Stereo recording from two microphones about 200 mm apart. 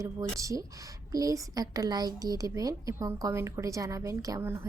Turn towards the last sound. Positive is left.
turn(degrees=-15)  # may be behind; listen again after turning